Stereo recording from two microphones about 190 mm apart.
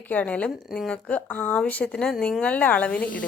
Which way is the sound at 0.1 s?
5° left (ahead or behind).